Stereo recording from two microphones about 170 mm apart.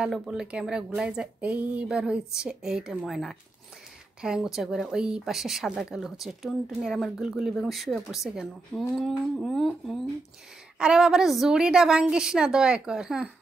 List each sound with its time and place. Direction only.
0.0 s a woman's voice: 5° right (ahead or behind)